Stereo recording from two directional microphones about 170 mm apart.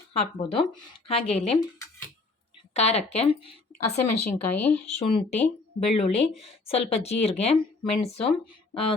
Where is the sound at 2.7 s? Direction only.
40° left (ahead or behind).